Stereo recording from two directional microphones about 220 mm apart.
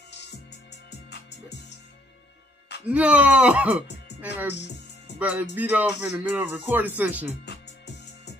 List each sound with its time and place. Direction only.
1.1 s music: 50° left (ahead or behind)
2.9 s speech: 5° right (ahead or behind)
5.2 s music: 5° right (ahead or behind)
7.4 s music: 50° left (ahead or behind)